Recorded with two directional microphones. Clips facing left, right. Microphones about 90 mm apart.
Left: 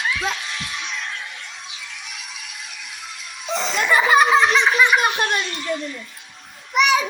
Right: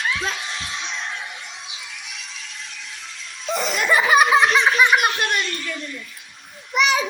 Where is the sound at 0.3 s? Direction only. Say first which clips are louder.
Even; 25° right (ahead or behind).